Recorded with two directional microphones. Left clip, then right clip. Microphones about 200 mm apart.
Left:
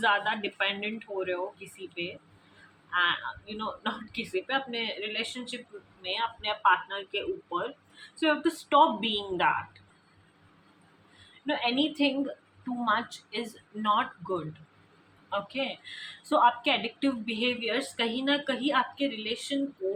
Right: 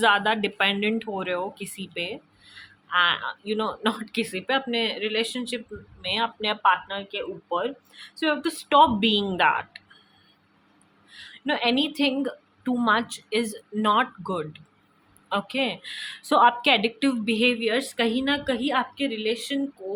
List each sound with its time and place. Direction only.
0.0 s speech: 55° right (ahead or behind)
11.4 s speech: 55° right (ahead or behind)